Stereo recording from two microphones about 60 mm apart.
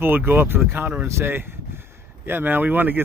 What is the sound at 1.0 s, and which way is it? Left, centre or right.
Speech, right.